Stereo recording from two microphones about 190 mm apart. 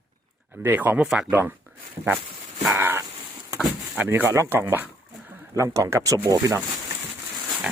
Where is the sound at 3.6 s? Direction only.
10° right (ahead or behind).